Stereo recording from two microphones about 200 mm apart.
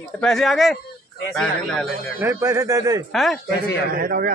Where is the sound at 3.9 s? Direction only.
45° right (ahead or behind).